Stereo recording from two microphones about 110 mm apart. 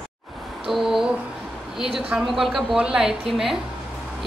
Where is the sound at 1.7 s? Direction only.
5° right (ahead or behind).